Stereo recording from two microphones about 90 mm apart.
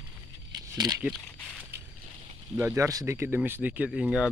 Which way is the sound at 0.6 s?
40° right (ahead or behind).